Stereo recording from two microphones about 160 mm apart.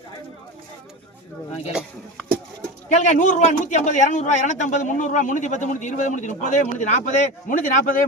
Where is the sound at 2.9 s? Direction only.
45° left (ahead or behind).